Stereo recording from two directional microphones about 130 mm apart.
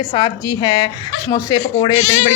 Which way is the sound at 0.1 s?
35° left (ahead or behind).